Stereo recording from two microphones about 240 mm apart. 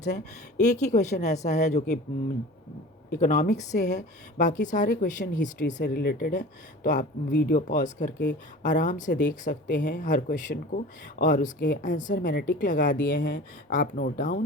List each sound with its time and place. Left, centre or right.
0.0 s speech: left
3.1 s speech: left